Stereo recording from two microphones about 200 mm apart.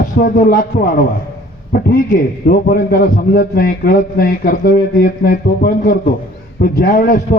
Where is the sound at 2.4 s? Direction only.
50° left (ahead or behind).